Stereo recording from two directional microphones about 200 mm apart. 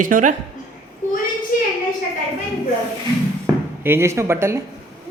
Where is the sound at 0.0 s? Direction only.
40° right (ahead or behind).